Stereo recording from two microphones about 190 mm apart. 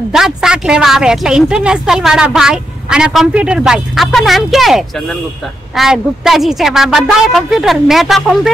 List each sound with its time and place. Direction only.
0.1 s speech: 5° right (ahead or behind)